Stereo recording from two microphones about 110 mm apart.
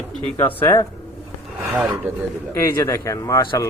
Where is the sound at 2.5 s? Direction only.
25° left (ahead or behind).